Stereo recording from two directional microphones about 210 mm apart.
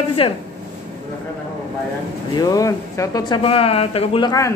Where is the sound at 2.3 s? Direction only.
15° left (ahead or behind).